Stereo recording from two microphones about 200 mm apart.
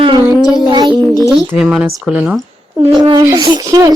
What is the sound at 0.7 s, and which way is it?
Speech, 20° right (ahead or behind).